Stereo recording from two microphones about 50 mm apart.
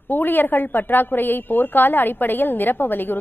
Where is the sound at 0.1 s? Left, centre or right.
Left.